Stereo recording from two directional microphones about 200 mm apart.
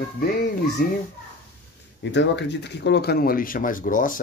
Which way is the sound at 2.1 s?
60° left (ahead or behind).